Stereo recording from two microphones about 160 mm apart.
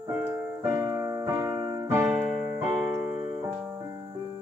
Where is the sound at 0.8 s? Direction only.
20° right (ahead or behind).